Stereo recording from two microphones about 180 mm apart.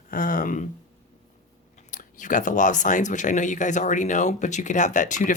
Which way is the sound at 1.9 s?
45° left (ahead or behind).